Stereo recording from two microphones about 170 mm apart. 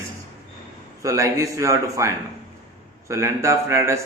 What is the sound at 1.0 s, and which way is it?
Speech, 20° right (ahead or behind).